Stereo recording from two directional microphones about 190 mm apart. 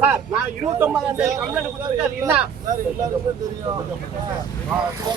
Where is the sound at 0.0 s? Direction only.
10° right (ahead or behind).